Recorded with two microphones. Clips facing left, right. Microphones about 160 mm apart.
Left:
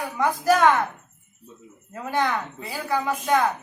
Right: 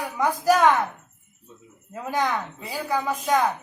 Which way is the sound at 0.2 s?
10° right (ahead or behind).